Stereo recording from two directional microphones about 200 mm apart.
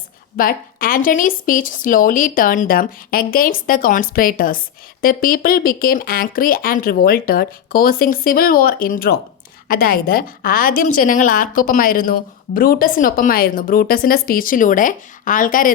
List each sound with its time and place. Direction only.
0.3 s speech: 45° left (ahead or behind)